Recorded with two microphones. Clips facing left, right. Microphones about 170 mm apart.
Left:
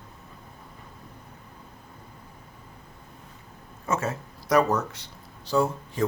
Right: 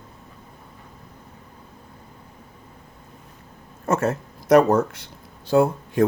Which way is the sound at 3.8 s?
60° right (ahead or behind).